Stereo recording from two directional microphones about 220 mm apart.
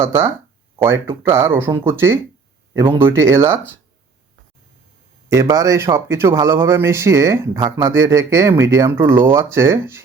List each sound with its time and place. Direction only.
0.0 s speech: 10° right (ahead or behind)
2.7 s speech: 20° right (ahead or behind)
3.0 s speech: 10° right (ahead or behind)
5.3 s speech: 15° right (ahead or behind)